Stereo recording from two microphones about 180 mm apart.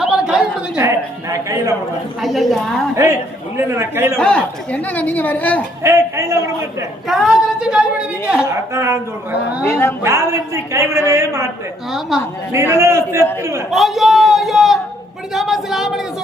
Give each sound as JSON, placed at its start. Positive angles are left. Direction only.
{"t": 0.0, "sound": "a sound", "side_deg": -5}
{"t": 0.8, "sound": "a woman's voice", "side_deg": -15}
{"t": 2.2, "sound": "speech", "side_deg": 0}
{"t": 2.9, "sound": "a woman's voice", "side_deg": -15}
{"t": 4.2, "sound": "speech", "side_deg": 5}
{"t": 5.8, "sound": "a woman's voice", "side_deg": -15}
{"t": 7.1, "sound": "a woman's voice", "side_deg": 0}
{"t": 9.6, "sound": "speech", "side_deg": 15}
{"t": 10.0, "sound": "a woman's voice", "side_deg": -15}
{"t": 11.9, "sound": "speech", "side_deg": 0}
{"t": 12.5, "sound": "a woman's voice", "side_deg": -15}
{"t": 13.7, "sound": "speech", "side_deg": 0}
{"t": 15.3, "sound": "a sound", "side_deg": 0}